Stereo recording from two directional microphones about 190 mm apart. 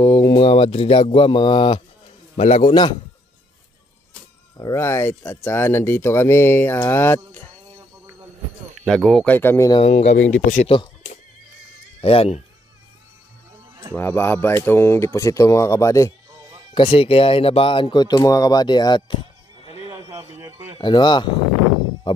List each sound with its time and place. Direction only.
0.0 s speech: 15° left (ahead or behind)
4.6 s speech: 15° left (ahead or behind)
8.8 s speech: centre (ahead or behind)
9.7 s a man's voice: 30° left (ahead or behind)
12.0 s a man's voice: 30° left (ahead or behind)
13.9 s speech: 10° left (ahead or behind)
16.7 s speech: 30° left (ahead or behind)
19.6 s a sound: 30° left (ahead or behind)
20.3 s a sound: 15° right (ahead or behind)
20.8 s speech: 25° left (ahead or behind)
22.1 s music: 25° left (ahead or behind)